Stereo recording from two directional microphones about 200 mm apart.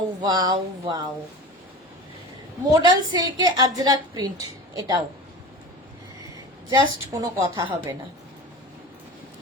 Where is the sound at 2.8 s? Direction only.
20° right (ahead or behind).